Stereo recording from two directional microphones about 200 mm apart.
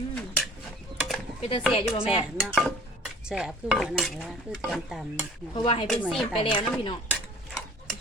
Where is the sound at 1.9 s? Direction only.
30° left (ahead or behind).